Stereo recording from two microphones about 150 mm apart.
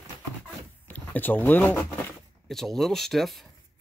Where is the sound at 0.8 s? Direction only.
10° left (ahead or behind).